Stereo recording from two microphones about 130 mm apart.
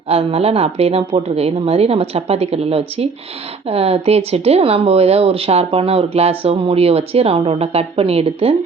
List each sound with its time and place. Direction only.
0.1 s speech: 50° right (ahead or behind)